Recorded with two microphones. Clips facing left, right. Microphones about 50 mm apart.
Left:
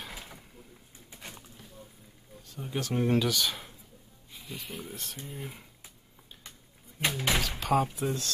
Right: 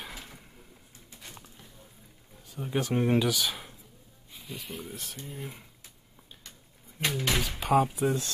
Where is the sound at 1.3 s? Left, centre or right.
Centre.